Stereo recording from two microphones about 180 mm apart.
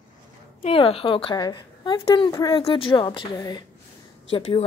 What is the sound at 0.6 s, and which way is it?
A woman's voice, 30° left (ahead or behind).